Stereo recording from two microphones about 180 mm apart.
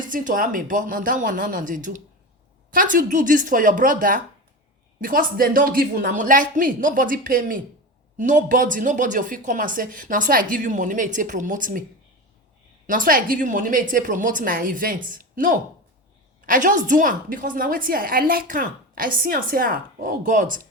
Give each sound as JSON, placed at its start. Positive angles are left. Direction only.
{"t": 0.1, "sound": "a woman's voice", "side_deg": -50}
{"t": 12.9, "sound": "a woman's voice", "side_deg": -50}